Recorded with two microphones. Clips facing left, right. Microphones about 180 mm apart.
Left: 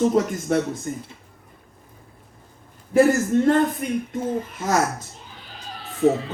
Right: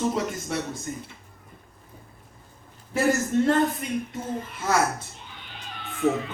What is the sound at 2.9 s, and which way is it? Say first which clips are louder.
Speech: left 6 dB; 50° left (ahead or behind).